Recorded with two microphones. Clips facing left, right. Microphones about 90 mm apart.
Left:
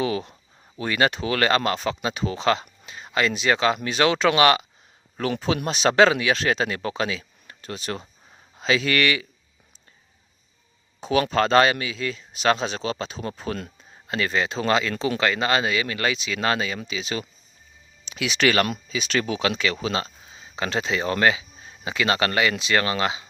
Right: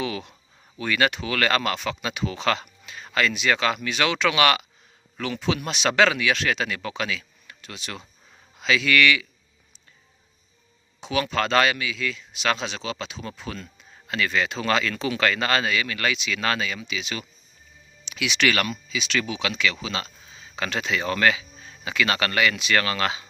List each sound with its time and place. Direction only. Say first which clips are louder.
0.0 s a sound: left 4 dB; 35° left (ahead or behind)
0.8 s speech: left 1 dB; 30° left (ahead or behind)
5.3 s speech: left 1 dB; 45° left (ahead or behind)
11.0 s speech: left 4 dB; 35° left (ahead or behind)